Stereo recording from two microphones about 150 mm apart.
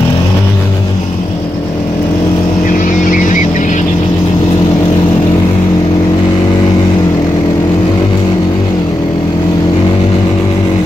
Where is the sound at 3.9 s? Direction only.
30° left (ahead or behind).